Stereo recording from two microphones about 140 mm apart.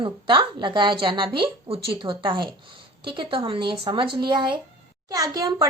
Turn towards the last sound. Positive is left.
turn(degrees=-25)  # may be behind; listen again after turning